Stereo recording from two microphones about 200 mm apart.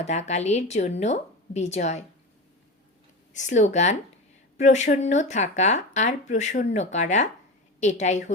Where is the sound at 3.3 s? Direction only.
35° left (ahead or behind).